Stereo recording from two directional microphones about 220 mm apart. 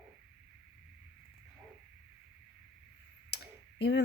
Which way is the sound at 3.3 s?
50° left (ahead or behind).